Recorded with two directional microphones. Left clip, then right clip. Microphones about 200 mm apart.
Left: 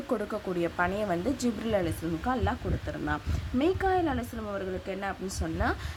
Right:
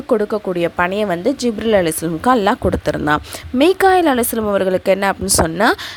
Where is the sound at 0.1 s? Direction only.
40° right (ahead or behind).